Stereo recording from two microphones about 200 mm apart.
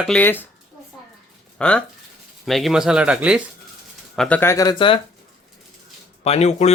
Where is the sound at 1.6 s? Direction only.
5° left (ahead or behind).